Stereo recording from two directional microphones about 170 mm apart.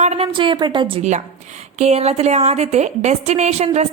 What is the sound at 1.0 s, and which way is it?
A woman's voice, 40° right (ahead or behind).